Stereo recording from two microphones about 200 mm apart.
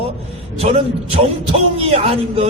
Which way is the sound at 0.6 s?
30° right (ahead or behind).